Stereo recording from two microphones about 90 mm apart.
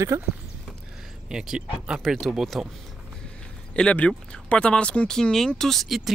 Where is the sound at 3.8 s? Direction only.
10° left (ahead or behind).